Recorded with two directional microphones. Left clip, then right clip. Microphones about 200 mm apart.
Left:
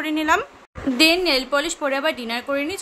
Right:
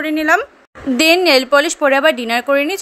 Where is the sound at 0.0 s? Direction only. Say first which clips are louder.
Right 6 dB; 25° right (ahead or behind).